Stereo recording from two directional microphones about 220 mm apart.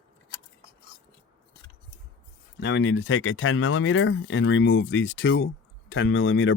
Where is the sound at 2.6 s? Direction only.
60° left (ahead or behind).